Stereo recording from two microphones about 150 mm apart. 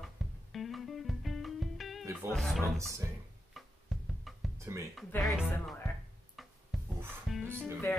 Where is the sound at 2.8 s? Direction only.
20° right (ahead or behind).